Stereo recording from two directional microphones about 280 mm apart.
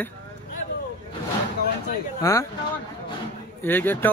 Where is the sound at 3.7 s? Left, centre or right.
Centre.